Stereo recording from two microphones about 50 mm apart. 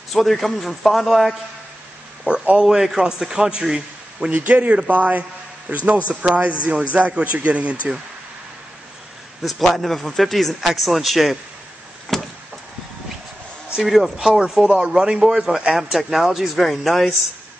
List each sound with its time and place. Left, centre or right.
0.1 s speech: centre
2.2 s a man's voice: centre
4.5 s a man's voice: right
9.6 s speech: centre
12.1 s vehicle: centre
13.7 s speech: centre
14.6 s a man's voice: centre